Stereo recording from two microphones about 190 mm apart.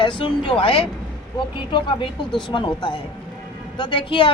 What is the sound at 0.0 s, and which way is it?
A woman's voice, 25° left (ahead or behind).